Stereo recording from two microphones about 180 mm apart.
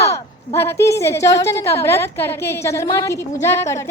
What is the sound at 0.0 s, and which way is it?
A woman's voice, 15° left (ahead or behind).